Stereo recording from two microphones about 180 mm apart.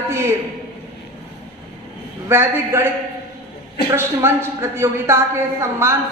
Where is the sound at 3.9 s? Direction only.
15° right (ahead or behind).